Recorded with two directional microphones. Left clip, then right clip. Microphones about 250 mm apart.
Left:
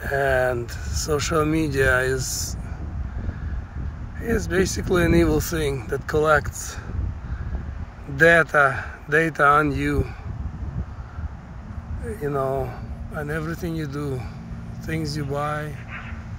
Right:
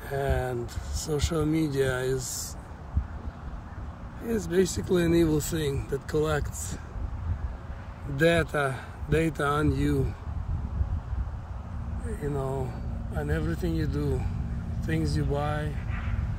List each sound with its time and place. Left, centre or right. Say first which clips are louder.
0.1 s speech: left 9 dB; centre
4.3 s speech: left 4 dB; centre
8.2 s speech: left 9 dB; centre
12.4 s speech: left 9 dB; left
12.6 s speech: left 4 dB; centre